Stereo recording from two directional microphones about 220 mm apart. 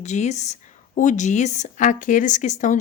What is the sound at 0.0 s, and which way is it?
A woman's voice, 30° left (ahead or behind).